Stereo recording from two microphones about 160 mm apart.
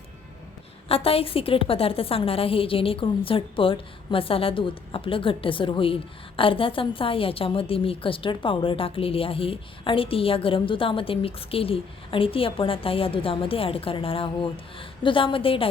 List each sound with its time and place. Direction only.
0.9 s a woman's voice: 35° left (ahead or behind)